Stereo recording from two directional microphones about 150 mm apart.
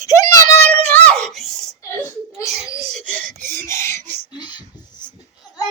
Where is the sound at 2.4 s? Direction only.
20° left (ahead or behind).